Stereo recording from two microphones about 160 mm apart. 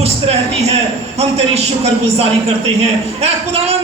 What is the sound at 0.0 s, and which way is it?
A man's voice, 40° right (ahead or behind).